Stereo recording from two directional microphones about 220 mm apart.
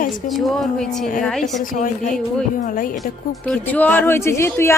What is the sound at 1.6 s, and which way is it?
A woman's voice, 40° left (ahead or behind).